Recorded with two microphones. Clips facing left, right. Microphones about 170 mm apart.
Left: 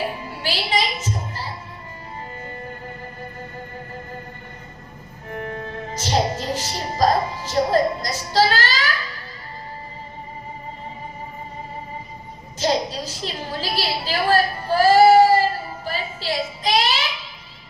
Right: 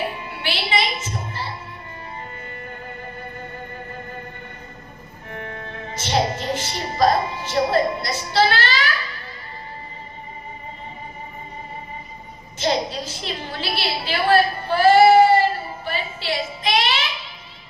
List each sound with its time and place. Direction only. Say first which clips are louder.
0.3 s music: even; 40° left (ahead or behind)
5.3 s music: left 4 dB; 35° left (ahead or behind)
12.5 s a sound: left 1 dB; 40° left (ahead or behind)
15.8 s music: even; 35° left (ahead or behind)